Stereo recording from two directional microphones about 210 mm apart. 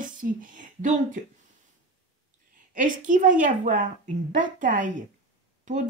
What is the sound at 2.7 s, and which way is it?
Speech, 40° right (ahead or behind).